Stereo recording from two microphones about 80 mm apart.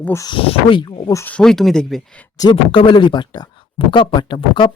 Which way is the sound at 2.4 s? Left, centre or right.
Left.